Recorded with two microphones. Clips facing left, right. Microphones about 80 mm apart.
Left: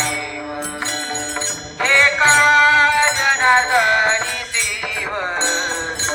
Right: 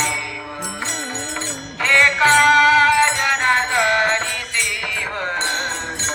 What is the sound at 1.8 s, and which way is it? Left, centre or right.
Music, left.